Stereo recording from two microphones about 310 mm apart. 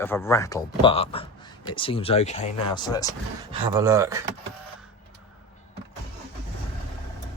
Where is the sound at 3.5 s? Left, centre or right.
Centre.